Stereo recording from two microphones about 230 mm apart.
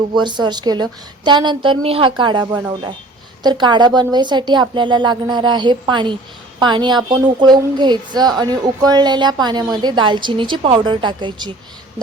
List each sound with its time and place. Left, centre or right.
0.1 s a woman's voice: centre